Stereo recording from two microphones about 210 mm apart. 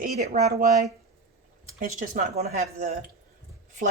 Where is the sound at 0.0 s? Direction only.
45° right (ahead or behind).